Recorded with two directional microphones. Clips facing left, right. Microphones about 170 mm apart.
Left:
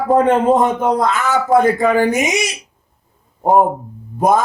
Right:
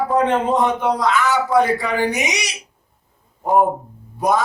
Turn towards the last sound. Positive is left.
turn(degrees=50)  # may be behind; listen again after turning